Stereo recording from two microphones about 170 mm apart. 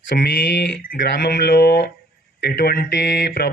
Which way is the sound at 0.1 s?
65° left (ahead or behind).